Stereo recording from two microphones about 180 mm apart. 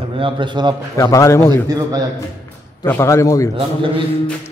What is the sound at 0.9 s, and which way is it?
Speech, 15° left (ahead or behind).